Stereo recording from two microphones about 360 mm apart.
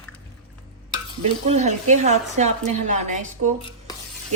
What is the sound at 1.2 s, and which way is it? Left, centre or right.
Speech, centre.